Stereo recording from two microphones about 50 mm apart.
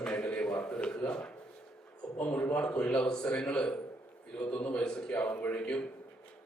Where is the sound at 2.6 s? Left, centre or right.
Left.